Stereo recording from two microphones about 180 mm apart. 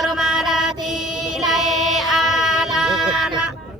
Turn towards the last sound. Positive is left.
turn(degrees=0)  # may be behind; listen again after turning